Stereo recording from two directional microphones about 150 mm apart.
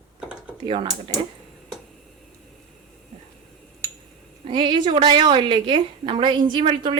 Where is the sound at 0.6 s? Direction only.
35° right (ahead or behind).